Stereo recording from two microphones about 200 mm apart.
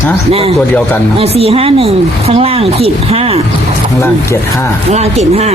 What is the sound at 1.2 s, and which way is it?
Speech, 30° right (ahead or behind).